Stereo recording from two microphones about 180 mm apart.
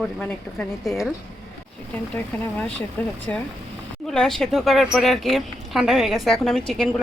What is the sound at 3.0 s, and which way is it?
A woman's voice, 10° left (ahead or behind).